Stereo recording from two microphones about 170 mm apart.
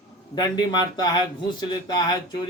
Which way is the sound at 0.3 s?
25° left (ahead or behind).